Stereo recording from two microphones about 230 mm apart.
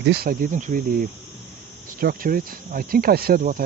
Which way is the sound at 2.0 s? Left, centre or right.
Right.